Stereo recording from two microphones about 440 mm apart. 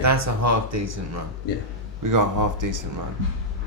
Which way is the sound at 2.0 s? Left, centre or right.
Right.